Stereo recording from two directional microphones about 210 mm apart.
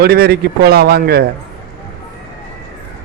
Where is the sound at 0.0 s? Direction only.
50° right (ahead or behind).